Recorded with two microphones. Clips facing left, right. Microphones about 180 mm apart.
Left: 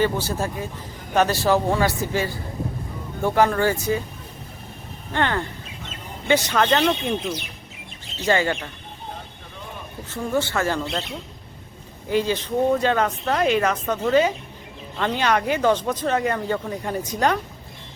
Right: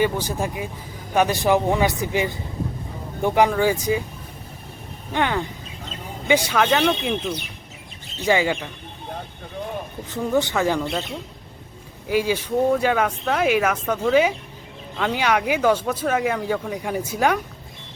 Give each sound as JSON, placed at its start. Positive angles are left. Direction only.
{"t": 0.0, "sound": "speech", "side_deg": -15}
{"t": 5.1, "sound": "speech", "side_deg": -15}
{"t": 8.2, "sound": "speech", "side_deg": -10}
{"t": 10.1, "sound": "speech", "side_deg": -15}
{"t": 12.0, "sound": "speech", "side_deg": -10}